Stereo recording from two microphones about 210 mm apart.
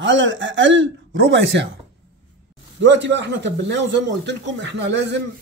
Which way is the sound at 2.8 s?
55° right (ahead or behind).